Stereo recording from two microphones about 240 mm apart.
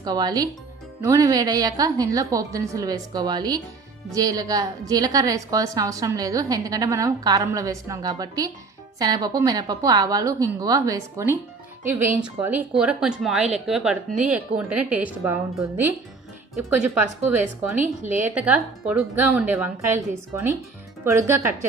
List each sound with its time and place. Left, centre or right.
0.0 s a woman's voice: centre
18.2 s a woman's voice: centre